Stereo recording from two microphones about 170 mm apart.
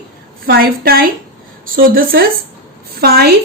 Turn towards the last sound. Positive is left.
turn(degrees=-65)  # may be behind; listen again after turning